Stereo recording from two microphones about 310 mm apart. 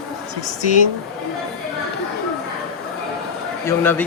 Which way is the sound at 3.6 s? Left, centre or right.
Centre.